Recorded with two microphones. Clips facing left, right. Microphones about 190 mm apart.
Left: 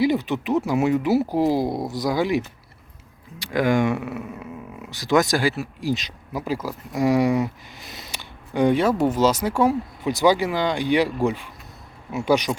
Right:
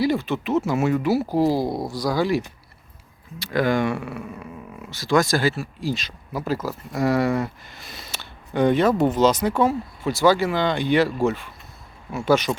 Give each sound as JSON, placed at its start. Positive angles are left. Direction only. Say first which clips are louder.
{"t": 0.0, "sound": "speech", "louder": "left 1 dB", "side_deg": 15}